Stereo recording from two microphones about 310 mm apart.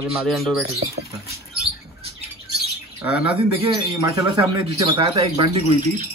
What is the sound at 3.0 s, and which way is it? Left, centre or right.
Speech, centre.